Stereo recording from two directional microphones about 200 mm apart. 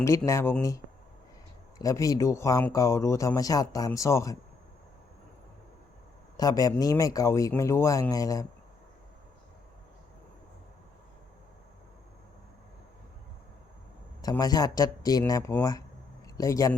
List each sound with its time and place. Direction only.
0.3 s speech: 10° left (ahead or behind)
1.8 s speech: 15° left (ahead or behind)
6.3 s speech: 20° left (ahead or behind)
14.2 s a man's voice: 20° left (ahead or behind)